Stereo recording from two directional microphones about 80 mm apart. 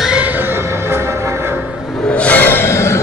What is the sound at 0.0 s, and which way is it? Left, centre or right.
Music, centre.